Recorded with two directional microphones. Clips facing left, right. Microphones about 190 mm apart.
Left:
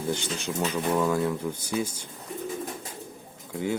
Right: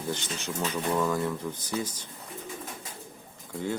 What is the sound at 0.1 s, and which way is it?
Speech, 10° left (ahead or behind).